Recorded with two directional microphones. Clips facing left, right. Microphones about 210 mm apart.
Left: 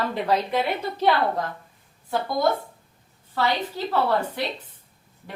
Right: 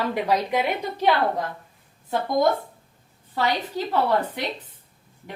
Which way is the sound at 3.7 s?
15° right (ahead or behind).